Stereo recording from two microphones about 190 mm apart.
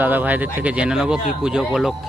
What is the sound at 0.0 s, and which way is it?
Speech, 10° right (ahead or behind).